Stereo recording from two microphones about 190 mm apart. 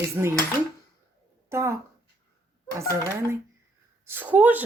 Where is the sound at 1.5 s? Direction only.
15° right (ahead or behind).